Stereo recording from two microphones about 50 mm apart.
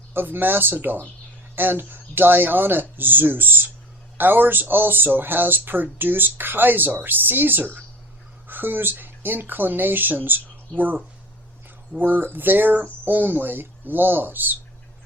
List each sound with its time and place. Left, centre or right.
0.1 s speech: right